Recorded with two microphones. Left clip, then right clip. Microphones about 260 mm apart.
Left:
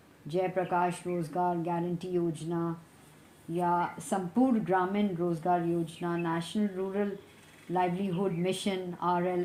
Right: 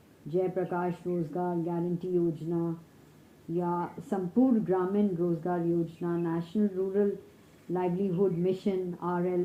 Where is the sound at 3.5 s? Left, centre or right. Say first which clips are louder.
Left 3 dB; left.